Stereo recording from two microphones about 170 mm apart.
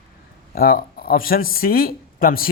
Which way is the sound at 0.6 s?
60° left (ahead or behind).